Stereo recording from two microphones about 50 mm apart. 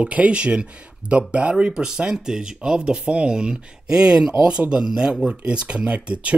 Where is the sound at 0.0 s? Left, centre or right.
Right.